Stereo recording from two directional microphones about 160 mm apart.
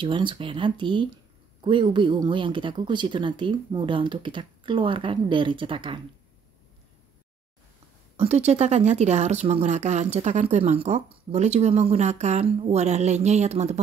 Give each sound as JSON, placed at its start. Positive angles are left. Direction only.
{"t": 0.0, "sound": "speech", "side_deg": -30}
{"t": 8.2, "sound": "speech", "side_deg": -45}